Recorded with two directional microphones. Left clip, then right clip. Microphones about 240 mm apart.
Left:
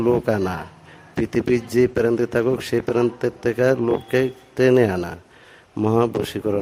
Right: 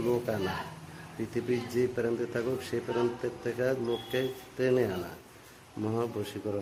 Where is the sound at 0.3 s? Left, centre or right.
Left.